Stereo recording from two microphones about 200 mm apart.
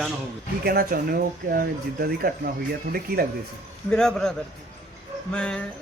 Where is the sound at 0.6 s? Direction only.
50° right (ahead or behind).